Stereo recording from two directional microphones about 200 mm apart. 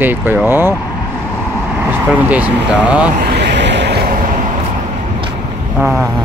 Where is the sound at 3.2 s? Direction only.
60° right (ahead or behind).